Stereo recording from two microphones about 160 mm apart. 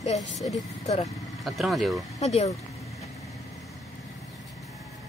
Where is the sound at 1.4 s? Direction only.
Centre (ahead or behind).